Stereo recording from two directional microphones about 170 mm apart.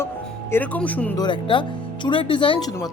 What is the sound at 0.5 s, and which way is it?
Speech, 10° left (ahead or behind).